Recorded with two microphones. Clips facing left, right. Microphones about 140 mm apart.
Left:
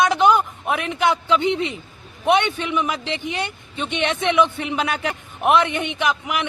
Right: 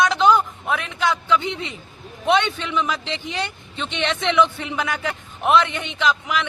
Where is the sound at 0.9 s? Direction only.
20° left (ahead or behind).